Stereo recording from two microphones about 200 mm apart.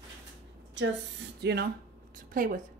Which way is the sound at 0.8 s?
65° right (ahead or behind).